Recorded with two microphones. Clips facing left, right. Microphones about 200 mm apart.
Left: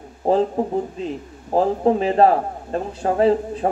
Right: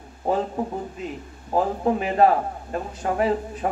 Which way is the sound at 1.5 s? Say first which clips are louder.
Left 4 dB; 30° left (ahead or behind).